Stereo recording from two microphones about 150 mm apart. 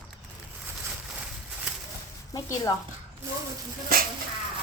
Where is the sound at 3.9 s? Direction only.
75° right (ahead or behind).